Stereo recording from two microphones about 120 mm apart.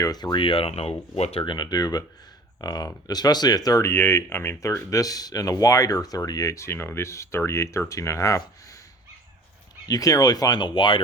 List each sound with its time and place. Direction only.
0.0 s speech: 35° left (ahead or behind)
0.7 s speech: 60° left (ahead or behind)
1.5 s speech: 35° left (ahead or behind)
9.8 s speech: 30° left (ahead or behind)